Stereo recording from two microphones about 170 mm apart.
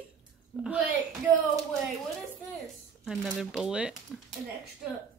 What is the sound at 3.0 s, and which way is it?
Speech, centre (ahead or behind).